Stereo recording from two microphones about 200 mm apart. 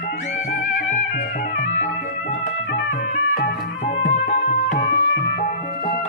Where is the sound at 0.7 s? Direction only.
45° left (ahead or behind).